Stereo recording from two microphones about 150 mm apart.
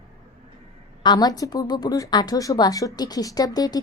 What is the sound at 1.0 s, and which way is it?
A woman's voice, 30° left (ahead or behind).